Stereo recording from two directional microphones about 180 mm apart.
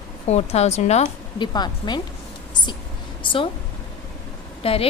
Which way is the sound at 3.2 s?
30° left (ahead or behind).